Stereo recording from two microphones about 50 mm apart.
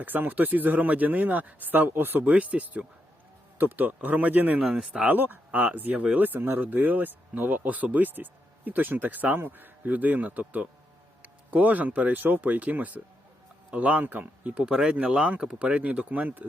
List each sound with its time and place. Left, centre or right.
0.0 s speech: right
2.2 s speech: right
3.6 s speech: right
4.6 s speech: centre
5.0 s speech: right
14.5 s speech: centre; by 16.5 s right